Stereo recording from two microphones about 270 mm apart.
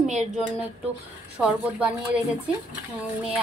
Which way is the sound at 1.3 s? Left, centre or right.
Centre.